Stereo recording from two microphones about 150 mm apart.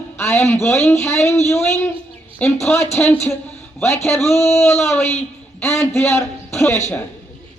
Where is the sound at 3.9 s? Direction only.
45° left (ahead or behind).